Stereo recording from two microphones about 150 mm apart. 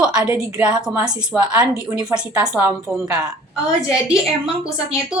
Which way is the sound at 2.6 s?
25° right (ahead or behind).